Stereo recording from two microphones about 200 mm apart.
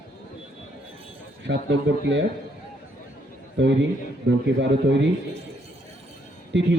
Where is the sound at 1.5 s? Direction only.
60° right (ahead or behind).